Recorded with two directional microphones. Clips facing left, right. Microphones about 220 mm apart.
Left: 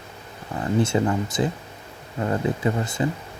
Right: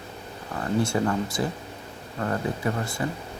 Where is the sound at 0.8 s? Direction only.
20° left (ahead or behind).